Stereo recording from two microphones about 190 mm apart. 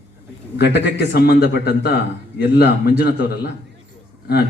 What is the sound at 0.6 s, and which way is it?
Speech, 65° left (ahead or behind).